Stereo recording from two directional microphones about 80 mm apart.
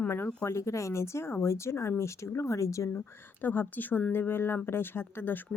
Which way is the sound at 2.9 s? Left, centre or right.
Left.